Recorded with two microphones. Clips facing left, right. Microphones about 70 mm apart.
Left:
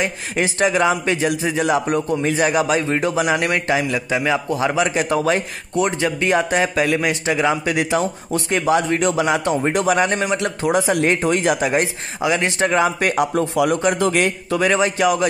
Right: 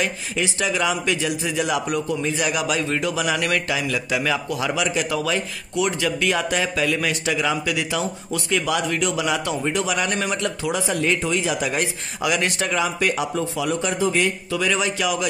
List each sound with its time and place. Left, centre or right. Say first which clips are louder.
0.0 s a man's voice: left 3 dB; left
10.4 s a man's voice: left 5 dB; left
12.2 s a man's voice: left 4 dB; left
13.9 s a man's voice: left 3 dB; left